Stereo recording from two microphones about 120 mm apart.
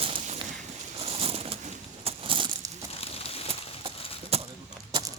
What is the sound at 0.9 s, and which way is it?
Crushing, 55° right (ahead or behind).